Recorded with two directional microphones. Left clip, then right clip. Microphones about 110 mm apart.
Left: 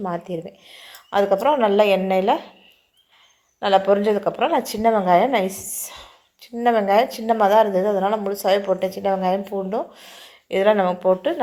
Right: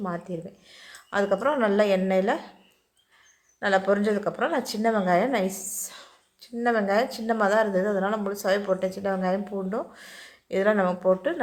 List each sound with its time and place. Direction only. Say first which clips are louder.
0.0 s a woman's voice: left 6 dB; 15° left (ahead or behind)
3.6 s a woman's voice: left 6 dB; 15° left (ahead or behind)